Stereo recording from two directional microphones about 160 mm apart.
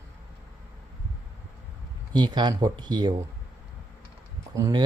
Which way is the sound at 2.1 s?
30° right (ahead or behind).